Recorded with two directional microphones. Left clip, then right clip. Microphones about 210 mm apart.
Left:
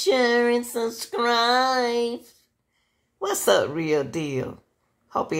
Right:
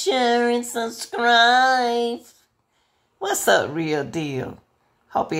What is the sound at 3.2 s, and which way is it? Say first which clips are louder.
Speech: right 2 dB; 20° right (ahead or behind).